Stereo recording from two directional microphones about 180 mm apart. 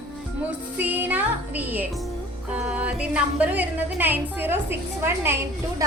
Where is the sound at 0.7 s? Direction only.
10° right (ahead or behind).